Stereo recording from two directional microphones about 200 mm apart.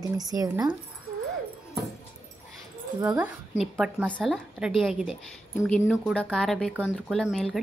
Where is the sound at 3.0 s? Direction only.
15° right (ahead or behind).